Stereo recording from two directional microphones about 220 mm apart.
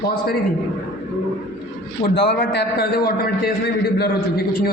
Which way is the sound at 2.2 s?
50° left (ahead or behind).